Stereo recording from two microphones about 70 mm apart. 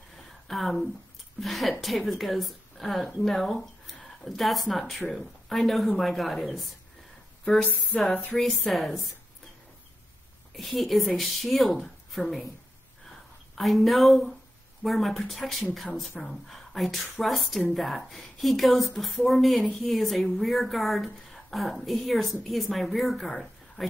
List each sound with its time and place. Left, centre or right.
0.5 s a woman's voice: centre
8.1 s speech: left
8.4 s a woman's voice: centre
10.5 s a woman's voice: centre
13.6 s a woman's voice: centre